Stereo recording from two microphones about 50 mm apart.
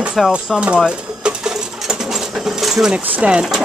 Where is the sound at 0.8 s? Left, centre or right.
Centre.